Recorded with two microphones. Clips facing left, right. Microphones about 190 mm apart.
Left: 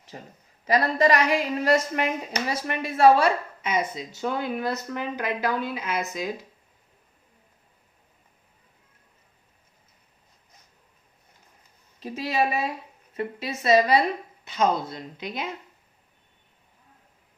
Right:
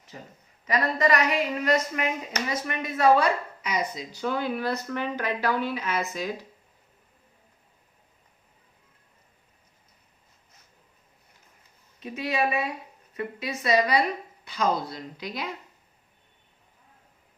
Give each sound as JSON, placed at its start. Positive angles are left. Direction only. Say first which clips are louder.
{"t": 0.1, "sound": "a woman's voice", "louder": "left 2 dB", "side_deg": 40}
{"t": 11.9, "sound": "a woman's voice", "louder": "left 2 dB", "side_deg": 30}